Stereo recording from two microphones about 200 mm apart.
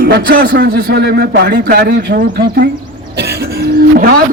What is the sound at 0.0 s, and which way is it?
A man's voice, 55° right (ahead or behind).